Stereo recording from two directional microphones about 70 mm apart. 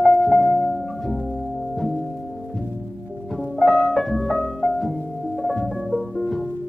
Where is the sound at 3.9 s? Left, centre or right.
Centre.